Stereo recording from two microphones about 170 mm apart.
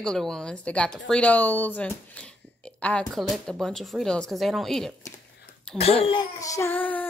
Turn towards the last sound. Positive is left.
turn(degrees=10)  # may be behind; listen again after turning